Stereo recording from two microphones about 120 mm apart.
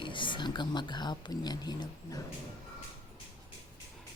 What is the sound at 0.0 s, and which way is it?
Speech, 45° left (ahead or behind).